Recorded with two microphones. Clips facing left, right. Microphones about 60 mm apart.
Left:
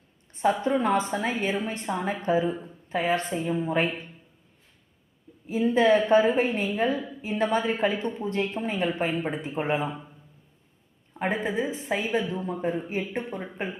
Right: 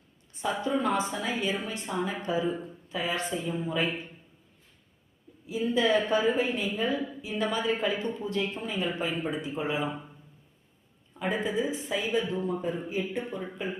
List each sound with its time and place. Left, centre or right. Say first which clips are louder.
0.6 s a woman's voice: left 3 dB; left
5.5 s a woman's voice: left 5 dB; left
11.4 s a woman's voice: left 2 dB; left